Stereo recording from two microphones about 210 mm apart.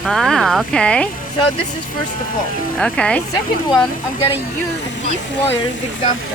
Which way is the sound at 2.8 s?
5° left (ahead or behind).